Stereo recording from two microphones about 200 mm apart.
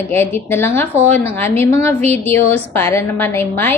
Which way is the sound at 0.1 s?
10° left (ahead or behind).